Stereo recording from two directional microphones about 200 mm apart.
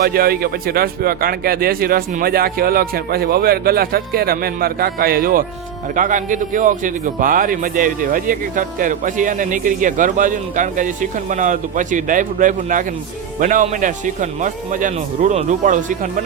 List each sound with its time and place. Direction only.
0.0 s a man's voice: 50° right (ahead or behind)